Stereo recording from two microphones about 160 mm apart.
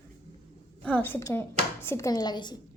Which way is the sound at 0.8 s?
10° left (ahead or behind).